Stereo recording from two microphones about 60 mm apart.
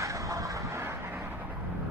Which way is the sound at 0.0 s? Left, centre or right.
Right.